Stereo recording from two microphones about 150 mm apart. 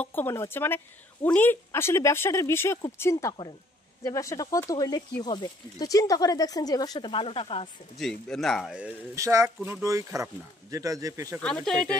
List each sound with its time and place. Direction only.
0.0 s a woman's voice: 15° left (ahead or behind); by 7.7 s 40° left (ahead or behind)
8.0 s a man's voice: 5° left (ahead or behind)
9.1 s speech: 20° right (ahead or behind)
11.4 s a man's voice: 5° left (ahead or behind)